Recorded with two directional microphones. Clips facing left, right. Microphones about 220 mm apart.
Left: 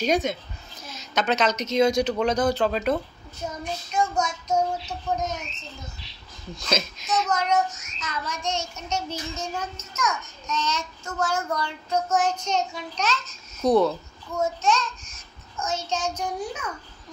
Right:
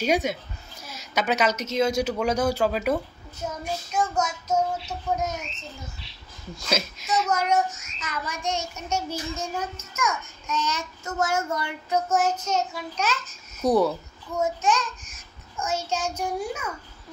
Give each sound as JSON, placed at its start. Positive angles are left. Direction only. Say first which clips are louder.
{"t": 0.0, "sound": "a woman's voice", "louder": "even", "side_deg": -10}
{"t": 3.6, "sound": "child singing", "louder": "left 1 dB", "side_deg": -5}
{"t": 6.5, "sound": "a child's voice", "louder": "left 1 dB", "side_deg": -10}
{"t": 12.2, "sound": "a child's voice", "louder": "even", "side_deg": -5}